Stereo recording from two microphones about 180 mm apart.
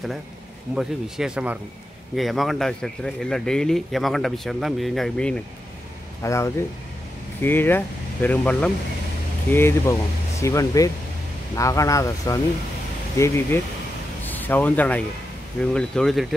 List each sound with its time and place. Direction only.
0.7 s speech: centre (ahead or behind)
6.2 s speech: 15° left (ahead or behind); by 16.3 s centre (ahead or behind)